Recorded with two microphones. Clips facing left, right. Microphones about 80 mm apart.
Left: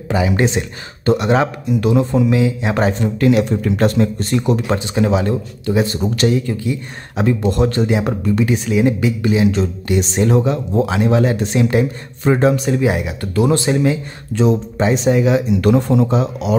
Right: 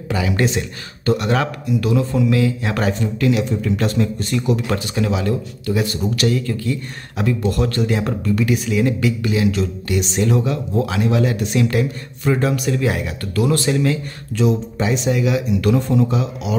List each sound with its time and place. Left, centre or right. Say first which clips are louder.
0.4 s speech: left 2 dB; left